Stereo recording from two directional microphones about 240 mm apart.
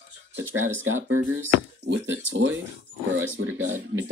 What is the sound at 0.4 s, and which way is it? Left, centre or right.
Speech, right.